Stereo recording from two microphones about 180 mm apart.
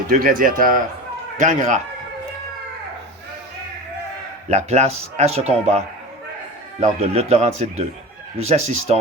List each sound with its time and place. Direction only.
0.1 s speech: 50° right (ahead or behind)
4.4 s speech: 40° right (ahead or behind)